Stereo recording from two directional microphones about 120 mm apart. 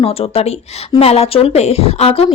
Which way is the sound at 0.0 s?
55° left (ahead or behind).